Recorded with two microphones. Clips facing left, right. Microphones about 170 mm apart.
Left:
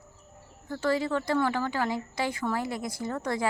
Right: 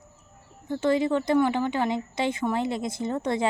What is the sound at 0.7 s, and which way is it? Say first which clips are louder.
A woman's voice: right 4 dB; 20° right (ahead or behind).